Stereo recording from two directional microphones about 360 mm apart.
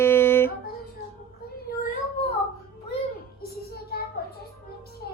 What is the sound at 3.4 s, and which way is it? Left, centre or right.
Child singing, left.